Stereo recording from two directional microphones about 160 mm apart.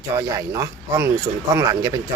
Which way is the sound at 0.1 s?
20° right (ahead or behind).